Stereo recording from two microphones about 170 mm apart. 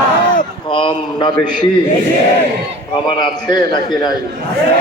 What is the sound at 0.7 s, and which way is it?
A man's voice, 30° left (ahead or behind).